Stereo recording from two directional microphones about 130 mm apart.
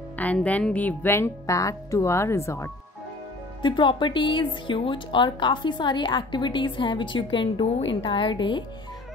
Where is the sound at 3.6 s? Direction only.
40° left (ahead or behind).